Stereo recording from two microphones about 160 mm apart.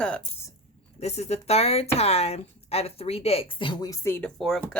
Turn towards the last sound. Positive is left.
turn(degrees=0)  # may be behind; listen again after turning